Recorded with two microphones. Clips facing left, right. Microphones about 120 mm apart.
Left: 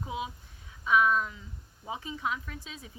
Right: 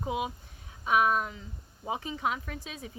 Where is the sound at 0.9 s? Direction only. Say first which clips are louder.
Even; 20° right (ahead or behind).